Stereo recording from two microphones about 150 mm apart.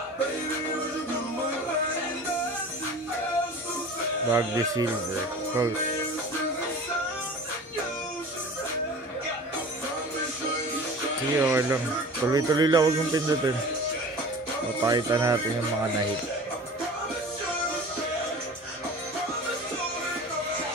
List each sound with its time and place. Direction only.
4.3 s speech: 20° right (ahead or behind)
11.3 s speech: 15° right (ahead or behind)
14.8 s speech: 25° right (ahead or behind)